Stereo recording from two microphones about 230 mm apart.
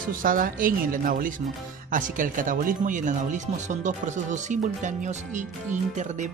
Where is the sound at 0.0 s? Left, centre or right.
Right.